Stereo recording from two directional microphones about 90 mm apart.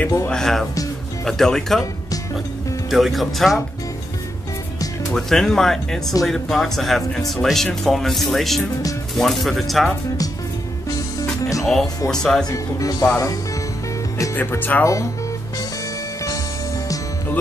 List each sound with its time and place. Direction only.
0.3 s speech: 5° left (ahead or behind)
2.9 s speech: centre (ahead or behind)
5.1 s speech: 5° left (ahead or behind)
11.6 s speech: 5° left (ahead or behind)
12.4 s speech: 40° left (ahead or behind)
14.3 s speech: 20° left (ahead or behind)